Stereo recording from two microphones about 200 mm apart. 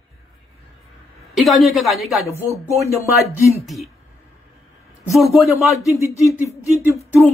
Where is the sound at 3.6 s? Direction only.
Centre (ahead or behind).